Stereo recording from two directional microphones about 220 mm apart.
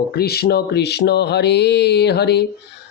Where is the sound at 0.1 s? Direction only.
45° left (ahead or behind).